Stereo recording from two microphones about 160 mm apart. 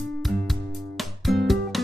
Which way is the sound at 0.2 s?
Centre (ahead or behind).